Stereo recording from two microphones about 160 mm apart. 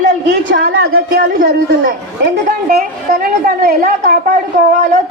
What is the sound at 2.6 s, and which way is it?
A woman's voice, 60° right (ahead or behind).